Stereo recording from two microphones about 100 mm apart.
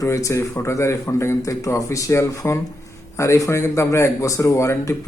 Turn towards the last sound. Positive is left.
turn(degrees=30)  # may be behind; listen again after turning